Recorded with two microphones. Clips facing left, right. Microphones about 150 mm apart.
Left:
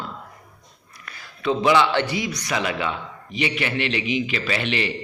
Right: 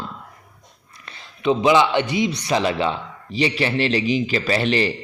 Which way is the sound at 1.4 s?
20° right (ahead or behind).